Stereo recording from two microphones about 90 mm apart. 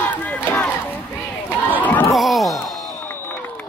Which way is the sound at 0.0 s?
20° left (ahead or behind).